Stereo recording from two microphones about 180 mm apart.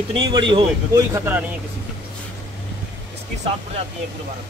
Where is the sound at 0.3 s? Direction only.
25° right (ahead or behind).